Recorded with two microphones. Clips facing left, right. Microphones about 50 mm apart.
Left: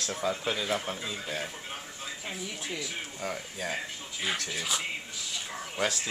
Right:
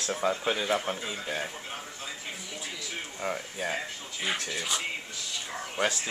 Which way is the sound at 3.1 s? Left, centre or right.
Centre.